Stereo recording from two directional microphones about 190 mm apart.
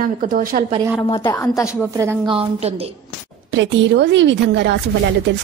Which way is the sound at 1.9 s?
15° right (ahead or behind).